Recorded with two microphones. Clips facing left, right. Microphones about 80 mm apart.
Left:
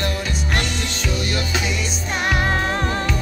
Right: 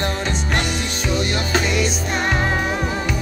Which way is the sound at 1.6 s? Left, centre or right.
Right.